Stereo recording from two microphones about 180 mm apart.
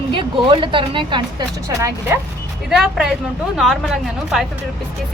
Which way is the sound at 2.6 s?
Centre (ahead or behind).